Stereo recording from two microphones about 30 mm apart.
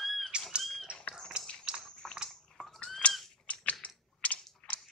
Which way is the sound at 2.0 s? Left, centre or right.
Centre.